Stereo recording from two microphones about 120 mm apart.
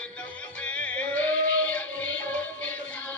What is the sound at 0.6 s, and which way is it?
Music, 10° left (ahead or behind).